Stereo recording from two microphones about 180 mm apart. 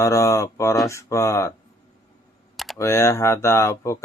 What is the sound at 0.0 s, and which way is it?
Speech, 15° left (ahead or behind).